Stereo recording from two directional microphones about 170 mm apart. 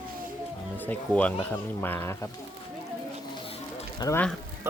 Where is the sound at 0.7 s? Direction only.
10° left (ahead or behind).